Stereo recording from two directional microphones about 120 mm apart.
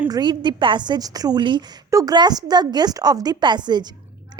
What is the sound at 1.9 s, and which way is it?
A woman's voice, 30° right (ahead or behind).